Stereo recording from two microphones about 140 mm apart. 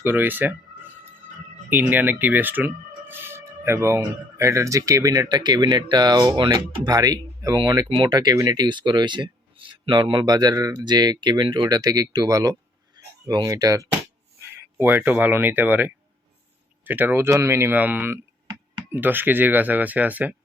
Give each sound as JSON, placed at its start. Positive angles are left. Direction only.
{"t": 0.0, "sound": "speech", "side_deg": -15}
{"t": 1.7, "sound": "speech", "side_deg": -15}
{"t": 14.8, "sound": "speech", "side_deg": -15}